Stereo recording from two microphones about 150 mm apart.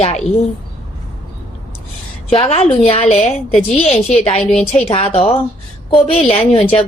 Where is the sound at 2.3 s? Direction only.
40° left (ahead or behind).